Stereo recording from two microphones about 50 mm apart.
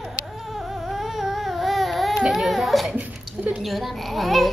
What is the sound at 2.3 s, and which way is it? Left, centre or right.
A child's voice, centre.